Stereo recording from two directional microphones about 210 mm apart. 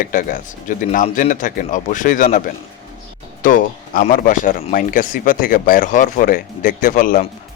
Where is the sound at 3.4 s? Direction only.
40° left (ahead or behind).